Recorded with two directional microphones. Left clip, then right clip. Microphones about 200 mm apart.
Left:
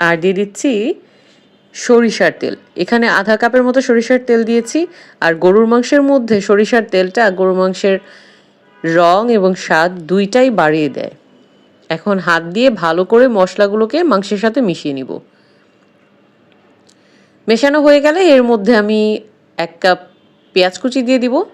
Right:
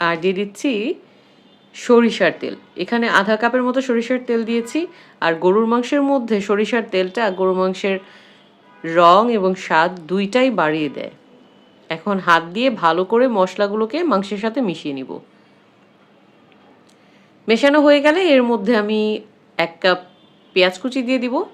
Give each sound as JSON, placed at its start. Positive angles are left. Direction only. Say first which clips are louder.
{"t": 0.0, "sound": "a woman's voice", "louder": "left 6 dB", "side_deg": 30}
{"t": 17.4, "sound": "a woman's voice", "louder": "left 3 dB", "side_deg": 30}